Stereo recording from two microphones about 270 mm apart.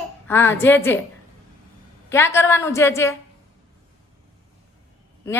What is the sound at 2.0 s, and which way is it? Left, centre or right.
A woman's voice, centre.